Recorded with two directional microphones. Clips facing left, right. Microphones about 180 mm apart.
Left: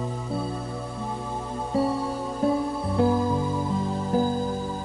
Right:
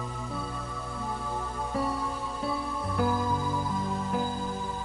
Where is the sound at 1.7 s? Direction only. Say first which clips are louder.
Left 7 dB; 30° left (ahead or behind).